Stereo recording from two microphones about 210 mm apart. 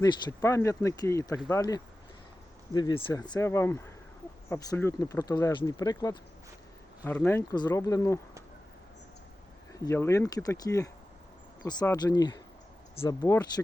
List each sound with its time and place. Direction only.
0.0 s speech: 15° left (ahead or behind)
9.7 s speech: 15° left (ahead or behind)